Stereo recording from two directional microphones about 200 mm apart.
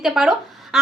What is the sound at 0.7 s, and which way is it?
Duck, centre (ahead or behind).